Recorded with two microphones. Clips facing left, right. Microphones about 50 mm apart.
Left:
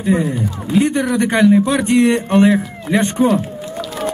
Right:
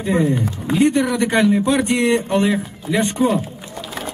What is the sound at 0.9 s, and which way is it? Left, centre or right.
A man's voice, left.